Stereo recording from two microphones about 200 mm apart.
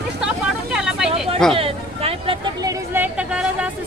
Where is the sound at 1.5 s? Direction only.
30° right (ahead or behind).